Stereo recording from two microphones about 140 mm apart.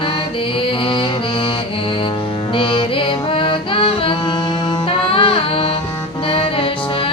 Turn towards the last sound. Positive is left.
turn(degrees=40)  # may be behind; listen again after turning